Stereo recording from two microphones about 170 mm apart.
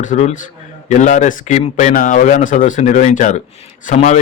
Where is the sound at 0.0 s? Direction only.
45° left (ahead or behind).